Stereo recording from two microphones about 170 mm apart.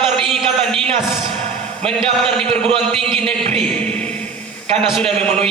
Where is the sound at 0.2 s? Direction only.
Centre (ahead or behind).